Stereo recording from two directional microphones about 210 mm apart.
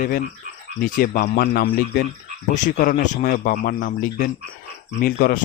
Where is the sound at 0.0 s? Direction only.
40° left (ahead or behind).